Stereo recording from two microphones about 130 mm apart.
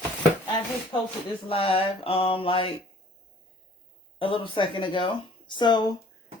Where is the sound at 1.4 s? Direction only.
45° left (ahead or behind).